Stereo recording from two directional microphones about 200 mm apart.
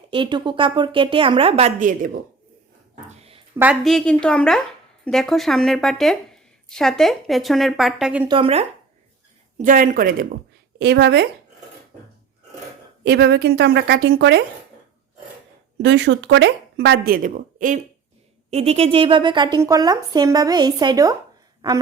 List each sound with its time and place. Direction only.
0.1 s a woman's voice: 25° right (ahead or behind); by 2.0 s 40° right (ahead or behind)
2.9 s a sound: 30° right (ahead or behind)
3.6 s a woman's voice: centre (ahead or behind)
8.3 s a woman's voice: 30° right (ahead or behind)
9.6 s speech: 40° right (ahead or behind)
13.1 s speech: 55° right (ahead or behind)
15.8 s a woman's voice: 60° right (ahead or behind); by 21.2 s 20° right (ahead or behind)